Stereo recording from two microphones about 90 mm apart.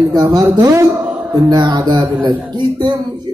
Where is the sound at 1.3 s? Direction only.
50° right (ahead or behind).